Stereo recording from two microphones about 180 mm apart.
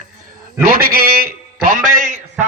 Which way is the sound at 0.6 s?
55° right (ahead or behind).